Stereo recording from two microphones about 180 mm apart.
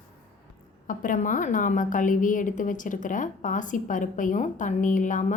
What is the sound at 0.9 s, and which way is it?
A woman's voice, 45° left (ahead or behind).